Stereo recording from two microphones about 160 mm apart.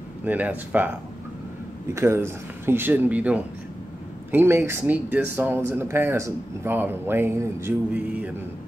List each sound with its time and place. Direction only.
0.2 s speech: 10° right (ahead or behind)
2.0 s speech: 15° right (ahead or behind)